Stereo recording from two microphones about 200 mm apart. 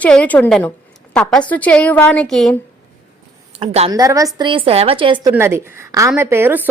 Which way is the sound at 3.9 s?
15° right (ahead or behind).